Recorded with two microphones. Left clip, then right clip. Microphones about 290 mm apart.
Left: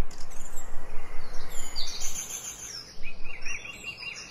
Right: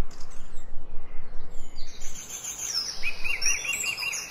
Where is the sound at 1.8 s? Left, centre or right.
Left.